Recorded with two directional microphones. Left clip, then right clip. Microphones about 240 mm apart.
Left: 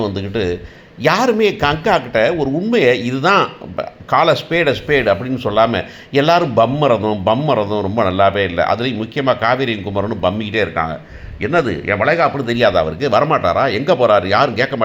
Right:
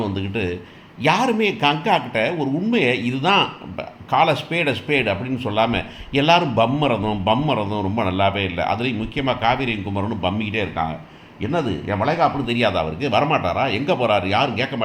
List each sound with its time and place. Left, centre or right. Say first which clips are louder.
0.0 s speech: left 5 dB; centre
12.5 s speech: left 6 dB; centre